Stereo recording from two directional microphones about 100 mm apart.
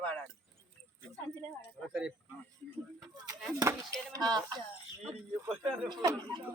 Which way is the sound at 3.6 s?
35° right (ahead or behind).